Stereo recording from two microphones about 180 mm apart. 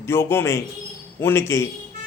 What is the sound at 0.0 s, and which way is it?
A man's voice, 15° left (ahead or behind).